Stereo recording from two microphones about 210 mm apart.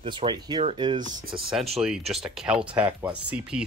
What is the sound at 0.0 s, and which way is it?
Speech, 25° right (ahead or behind).